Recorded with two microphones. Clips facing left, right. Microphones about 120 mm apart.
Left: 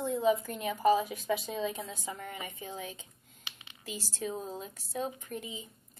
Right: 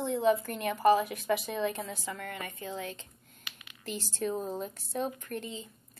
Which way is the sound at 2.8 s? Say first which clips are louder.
Right 3 dB; 5° left (ahead or behind).